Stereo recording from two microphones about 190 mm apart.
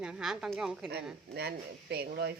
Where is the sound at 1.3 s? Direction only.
55° right (ahead or behind).